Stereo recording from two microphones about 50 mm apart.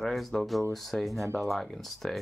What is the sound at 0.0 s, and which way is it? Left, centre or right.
Speech, centre.